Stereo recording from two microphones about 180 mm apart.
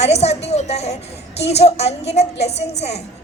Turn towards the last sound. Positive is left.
turn(degrees=35)  # may be behind; listen again after turning